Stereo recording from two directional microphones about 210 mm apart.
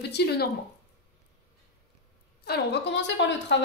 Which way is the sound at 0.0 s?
50° left (ahead or behind).